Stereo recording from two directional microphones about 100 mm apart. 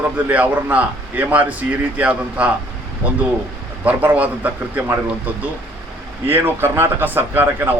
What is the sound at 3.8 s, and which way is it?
A man's voice, 15° right (ahead or behind).